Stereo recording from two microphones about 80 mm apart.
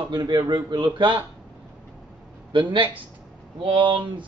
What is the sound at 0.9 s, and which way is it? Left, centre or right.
Speech, right.